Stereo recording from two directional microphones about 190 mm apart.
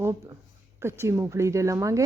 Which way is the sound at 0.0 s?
15° right (ahead or behind).